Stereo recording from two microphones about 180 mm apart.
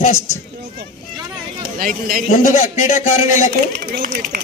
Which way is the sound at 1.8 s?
50° right (ahead or behind).